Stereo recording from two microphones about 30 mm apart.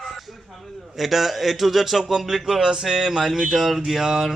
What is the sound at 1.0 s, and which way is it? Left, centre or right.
A man's voice, centre.